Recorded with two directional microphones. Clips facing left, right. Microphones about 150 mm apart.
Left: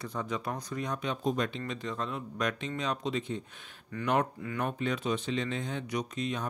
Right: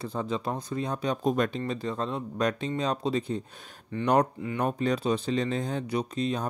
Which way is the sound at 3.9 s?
25° right (ahead or behind).